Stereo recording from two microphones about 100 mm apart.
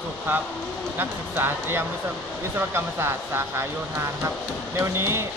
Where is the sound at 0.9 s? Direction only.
20° right (ahead or behind).